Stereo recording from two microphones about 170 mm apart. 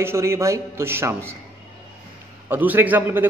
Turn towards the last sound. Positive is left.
turn(degrees=-10)  # may be behind; listen again after turning